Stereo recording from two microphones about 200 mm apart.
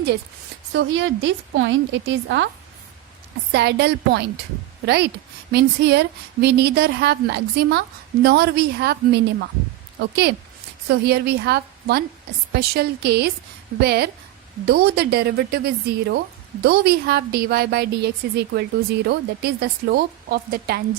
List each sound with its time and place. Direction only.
0.7 s a woman's voice: 65° right (ahead or behind)
3.5 s a woman's voice: 55° right (ahead or behind)